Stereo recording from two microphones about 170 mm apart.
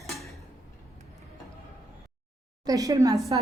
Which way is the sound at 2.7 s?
20° right (ahead or behind).